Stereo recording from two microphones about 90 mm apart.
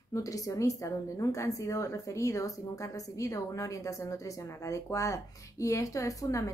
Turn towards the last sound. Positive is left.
turn(degrees=40)  # may be behind; listen again after turning